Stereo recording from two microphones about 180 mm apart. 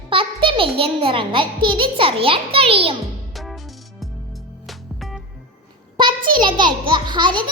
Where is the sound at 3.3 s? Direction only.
Centre (ahead or behind).